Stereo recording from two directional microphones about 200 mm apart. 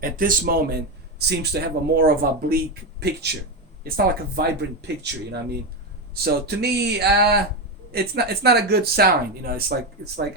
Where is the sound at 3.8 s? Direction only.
50° right (ahead or behind).